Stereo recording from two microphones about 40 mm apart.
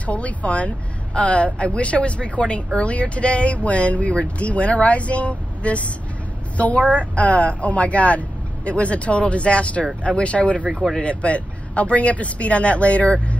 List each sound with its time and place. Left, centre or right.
0.0 s a woman's voice: left
10.7 s speech: centre
11.0 s speech: left